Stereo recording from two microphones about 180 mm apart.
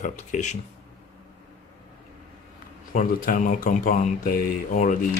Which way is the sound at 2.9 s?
50° left (ahead or behind).